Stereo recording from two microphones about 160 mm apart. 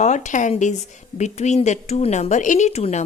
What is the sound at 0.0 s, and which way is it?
Speech, 50° left (ahead or behind).